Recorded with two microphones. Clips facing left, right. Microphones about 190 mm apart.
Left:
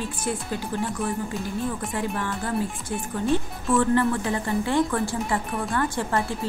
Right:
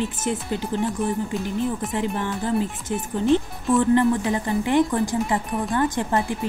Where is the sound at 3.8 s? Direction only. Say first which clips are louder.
Right 3 dB; 20° right (ahead or behind).